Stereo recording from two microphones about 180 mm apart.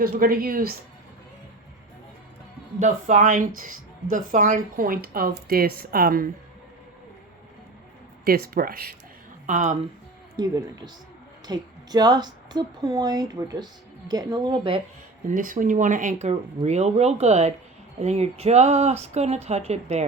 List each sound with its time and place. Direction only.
0.0 s a woman's voice: 55° right (ahead or behind)
2.7 s a woman's voice: 45° right (ahead or behind)
8.2 s speech: 55° right (ahead or behind)
9.5 s speech: 40° right (ahead or behind)
10.3 s a woman's voice: 20° right (ahead or behind)
15.3 s a woman's voice: 45° right (ahead or behind)